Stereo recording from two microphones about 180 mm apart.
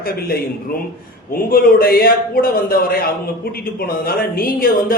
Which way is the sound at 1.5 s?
55° left (ahead or behind).